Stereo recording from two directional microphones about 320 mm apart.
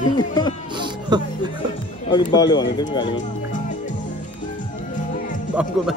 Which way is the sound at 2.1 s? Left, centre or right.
Centre.